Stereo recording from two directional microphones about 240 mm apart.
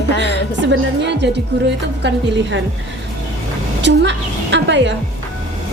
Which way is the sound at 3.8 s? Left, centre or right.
Right.